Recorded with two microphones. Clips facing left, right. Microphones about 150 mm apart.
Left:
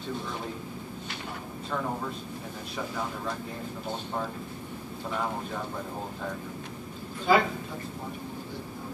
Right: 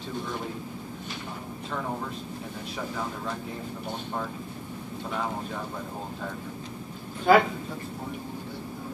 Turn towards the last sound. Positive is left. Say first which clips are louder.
# right 4 dB
turn(degrees=-55)  # may be behind; listen again after turning